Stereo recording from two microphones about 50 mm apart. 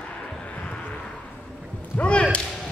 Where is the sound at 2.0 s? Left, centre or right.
Left.